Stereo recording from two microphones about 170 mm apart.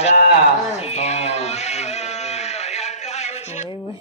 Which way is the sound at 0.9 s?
40° left (ahead or behind).